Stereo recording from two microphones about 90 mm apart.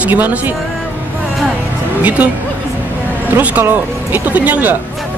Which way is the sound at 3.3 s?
20° right (ahead or behind).